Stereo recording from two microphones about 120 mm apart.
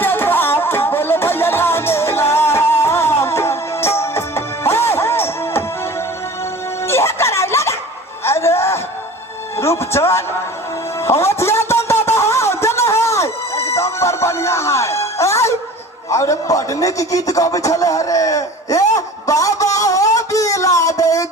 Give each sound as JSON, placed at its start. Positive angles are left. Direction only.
{"t": 0.0, "sound": "music", "side_deg": 15}
{"t": 6.8, "sound": "music", "side_deg": 20}
{"t": 11.0, "sound": "a sound", "side_deg": 20}